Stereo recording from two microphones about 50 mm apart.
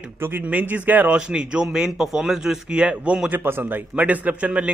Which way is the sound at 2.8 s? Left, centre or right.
Right.